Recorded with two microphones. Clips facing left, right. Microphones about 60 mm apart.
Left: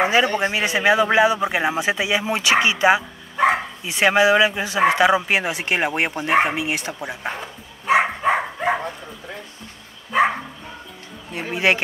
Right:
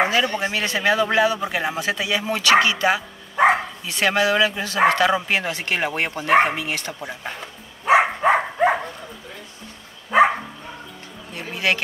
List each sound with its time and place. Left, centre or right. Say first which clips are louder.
0.0 s a man's voice: left 2 dB; left
7.8 s a sound: right 2 dB; centre
11.3 s a man's voice: left 3 dB; left